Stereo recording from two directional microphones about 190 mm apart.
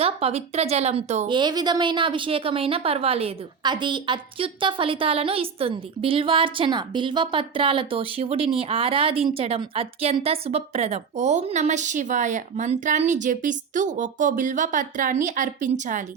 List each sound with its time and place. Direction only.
0.0 s speech: 30° right (ahead or behind)
1.3 s speech: 25° right (ahead or behind); by 16.0 s 40° right (ahead or behind)